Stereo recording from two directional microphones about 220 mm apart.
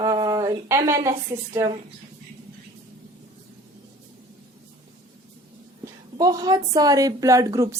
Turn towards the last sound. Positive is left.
turn(degrees=-15)  # may be behind; listen again after turning